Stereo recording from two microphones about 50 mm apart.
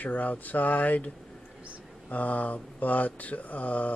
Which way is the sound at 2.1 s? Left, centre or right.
Left.